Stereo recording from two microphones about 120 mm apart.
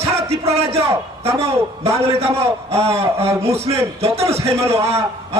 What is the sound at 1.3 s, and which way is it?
Speech, 25° right (ahead or behind).